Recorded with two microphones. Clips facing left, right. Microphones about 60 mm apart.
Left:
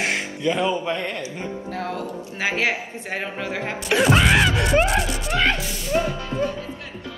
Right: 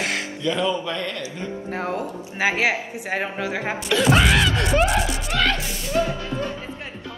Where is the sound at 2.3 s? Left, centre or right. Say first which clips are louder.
Right 2 dB; centre.